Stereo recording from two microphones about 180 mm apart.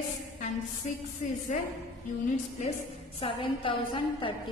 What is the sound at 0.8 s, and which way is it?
Music, 40° left (ahead or behind).